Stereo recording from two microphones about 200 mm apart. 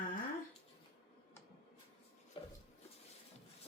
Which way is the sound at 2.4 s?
25° left (ahead or behind).